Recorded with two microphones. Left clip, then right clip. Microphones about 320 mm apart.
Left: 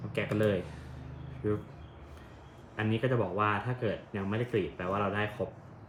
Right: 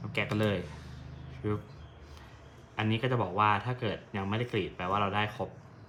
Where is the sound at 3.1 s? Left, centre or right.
Centre.